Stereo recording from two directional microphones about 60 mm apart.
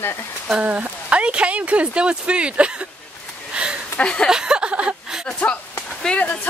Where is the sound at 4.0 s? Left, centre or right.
Centre.